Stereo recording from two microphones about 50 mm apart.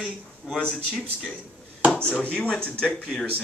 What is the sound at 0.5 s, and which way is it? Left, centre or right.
Speech, left.